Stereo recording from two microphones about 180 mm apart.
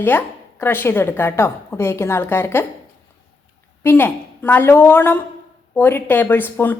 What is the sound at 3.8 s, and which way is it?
A woman's voice, 10° left (ahead or behind).